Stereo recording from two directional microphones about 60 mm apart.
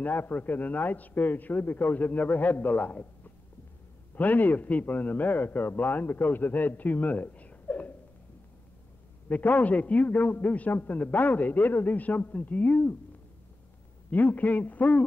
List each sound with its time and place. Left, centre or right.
0.0 s a man's voice: left
4.1 s a man's voice: left
9.3 s a man's voice: left
14.1 s a man's voice: left